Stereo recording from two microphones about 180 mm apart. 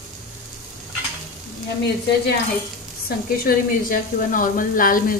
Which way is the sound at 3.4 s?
50° left (ahead or behind).